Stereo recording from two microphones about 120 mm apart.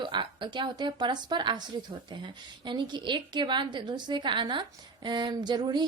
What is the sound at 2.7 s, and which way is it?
A woman's voice, 40° right (ahead or behind).